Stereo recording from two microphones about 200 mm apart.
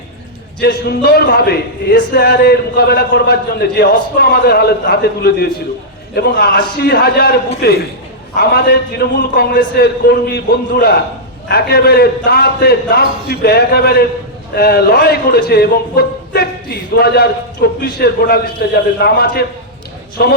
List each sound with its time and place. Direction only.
0.6 s speech: 50° left (ahead or behind)